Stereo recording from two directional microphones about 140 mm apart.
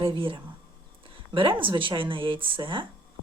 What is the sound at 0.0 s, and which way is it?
A woman's voice, 40° right (ahead or behind).